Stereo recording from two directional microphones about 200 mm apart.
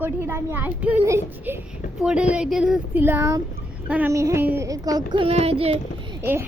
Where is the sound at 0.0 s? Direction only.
10° right (ahead or behind); by 5.8 s 30° right (ahead or behind).